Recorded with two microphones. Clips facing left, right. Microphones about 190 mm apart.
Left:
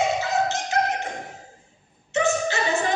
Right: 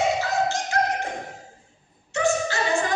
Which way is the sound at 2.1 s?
20° left (ahead or behind).